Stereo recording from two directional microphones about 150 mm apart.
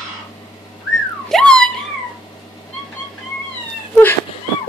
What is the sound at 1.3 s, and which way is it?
Dog, 5° left (ahead or behind).